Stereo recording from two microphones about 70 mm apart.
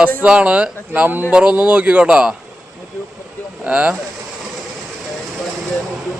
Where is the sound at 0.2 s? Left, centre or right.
Centre.